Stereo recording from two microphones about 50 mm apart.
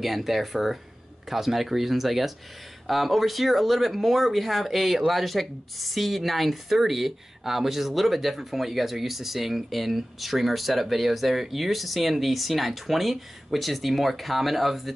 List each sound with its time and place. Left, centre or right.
0.0 s speech: centre